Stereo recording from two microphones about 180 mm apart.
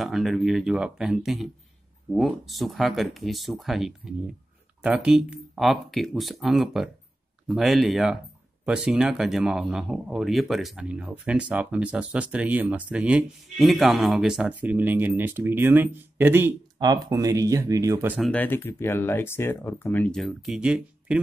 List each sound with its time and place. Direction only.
0.0 s speech: centre (ahead or behind)
18.3 s speech: 10° left (ahead or behind)